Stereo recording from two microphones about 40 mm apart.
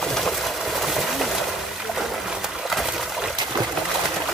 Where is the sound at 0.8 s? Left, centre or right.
Centre.